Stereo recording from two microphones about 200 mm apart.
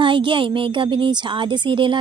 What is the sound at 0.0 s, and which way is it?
A woman's voice, 25° right (ahead or behind).